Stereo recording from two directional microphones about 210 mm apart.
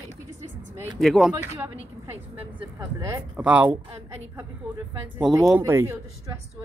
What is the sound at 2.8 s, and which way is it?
Speech, 15° right (ahead or behind).